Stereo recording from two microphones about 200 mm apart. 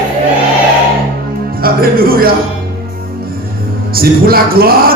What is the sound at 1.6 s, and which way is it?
Speech, 50° right (ahead or behind).